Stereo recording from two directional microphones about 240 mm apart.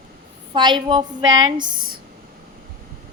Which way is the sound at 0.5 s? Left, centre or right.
Centre.